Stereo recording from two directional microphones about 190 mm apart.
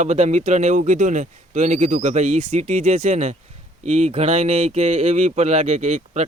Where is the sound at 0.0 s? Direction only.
35° right (ahead or behind).